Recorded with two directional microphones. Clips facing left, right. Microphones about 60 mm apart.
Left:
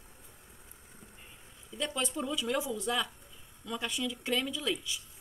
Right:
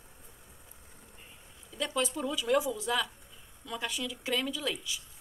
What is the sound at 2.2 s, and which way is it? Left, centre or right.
Speech, centre.